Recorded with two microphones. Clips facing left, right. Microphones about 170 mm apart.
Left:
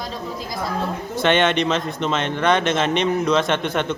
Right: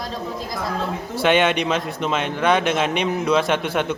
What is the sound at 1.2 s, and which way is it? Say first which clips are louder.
A man's voice: even; 5° right (ahead or behind).